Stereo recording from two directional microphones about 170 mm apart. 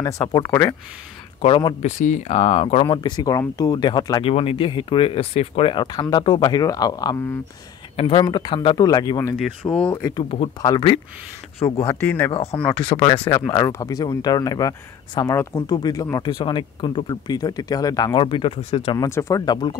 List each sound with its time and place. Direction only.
0.0 s speech: 20° left (ahead or behind)
1.4 s speech: 30° left (ahead or behind)
1.8 s speech: 45° left (ahead or behind); by 7.3 s 25° left (ahead or behind)
7.9 s speech: 35° left (ahead or behind); by 9.8 s 15° left (ahead or behind)
10.3 s speech: 30° left (ahead or behind)
11.8 s speech: 10° left (ahead or behind)
12.3 s speech: 35° left (ahead or behind)
12.5 s speech: 10° left (ahead or behind)
12.9 s speech: 30° left (ahead or behind)
18.9 s speech: 15° left (ahead or behind)